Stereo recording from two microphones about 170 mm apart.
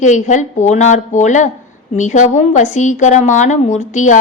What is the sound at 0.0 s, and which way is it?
A woman's voice, 45° left (ahead or behind).